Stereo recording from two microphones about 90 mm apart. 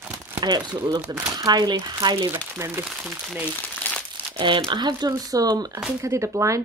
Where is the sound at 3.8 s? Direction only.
20° left (ahead or behind).